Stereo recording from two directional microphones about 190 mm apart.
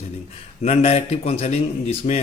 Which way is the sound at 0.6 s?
30° left (ahead or behind).